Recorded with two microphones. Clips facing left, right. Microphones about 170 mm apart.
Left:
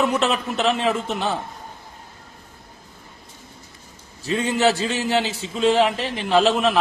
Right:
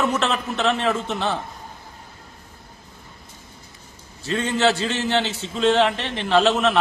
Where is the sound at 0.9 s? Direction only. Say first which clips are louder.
Left 1 dB; 20° left (ahead or behind).